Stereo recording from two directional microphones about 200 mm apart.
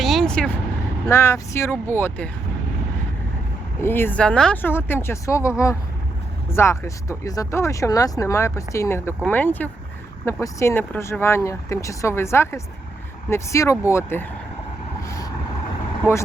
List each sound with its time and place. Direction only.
0.0 s vehicle: centre (ahead or behind)
1.0 s speech: 15° left (ahead or behind)
3.8 s speech: 10° left (ahead or behind)
15.0 s vehicle: 15° left (ahead or behind)